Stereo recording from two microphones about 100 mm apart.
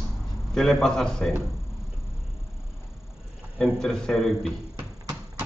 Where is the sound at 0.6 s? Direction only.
Centre (ahead or behind).